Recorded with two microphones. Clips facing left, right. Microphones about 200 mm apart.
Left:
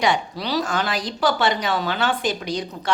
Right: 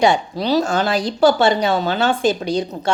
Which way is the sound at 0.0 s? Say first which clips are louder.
Right 6 dB; 25° right (ahead or behind).